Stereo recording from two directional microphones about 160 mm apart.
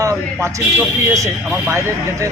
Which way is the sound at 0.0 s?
20° right (ahead or behind).